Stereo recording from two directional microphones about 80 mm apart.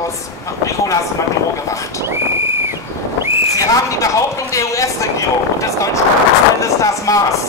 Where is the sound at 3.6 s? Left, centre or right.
Left.